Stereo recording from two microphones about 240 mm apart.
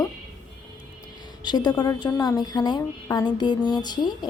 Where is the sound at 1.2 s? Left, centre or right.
Centre.